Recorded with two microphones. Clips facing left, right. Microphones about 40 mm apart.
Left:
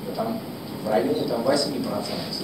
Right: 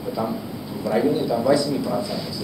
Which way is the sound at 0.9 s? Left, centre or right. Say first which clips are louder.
Right 2 dB; centre.